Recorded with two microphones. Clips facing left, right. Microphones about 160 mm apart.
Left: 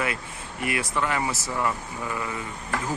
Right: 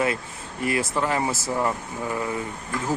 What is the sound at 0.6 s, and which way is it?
Speech, 35° right (ahead or behind).